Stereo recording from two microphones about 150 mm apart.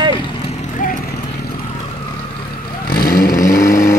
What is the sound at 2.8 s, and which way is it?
Vehicle, 80° left.